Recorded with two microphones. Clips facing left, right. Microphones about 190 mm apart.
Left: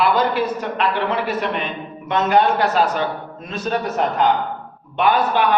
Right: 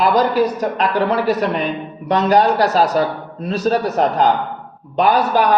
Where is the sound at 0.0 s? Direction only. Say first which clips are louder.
Right 3 dB; 40° right (ahead or behind).